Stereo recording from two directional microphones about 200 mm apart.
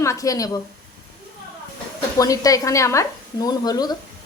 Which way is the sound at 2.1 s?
15° left (ahead or behind).